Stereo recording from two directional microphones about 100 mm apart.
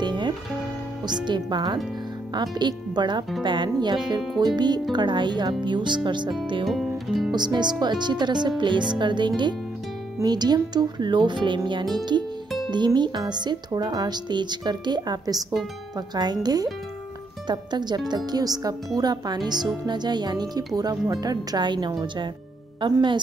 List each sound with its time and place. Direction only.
0.0 s music: 50° right (ahead or behind)
1.2 s speech: 50° right (ahead or behind)
6.7 s music: centre (ahead or behind)
7.3 s speech: 45° right (ahead or behind)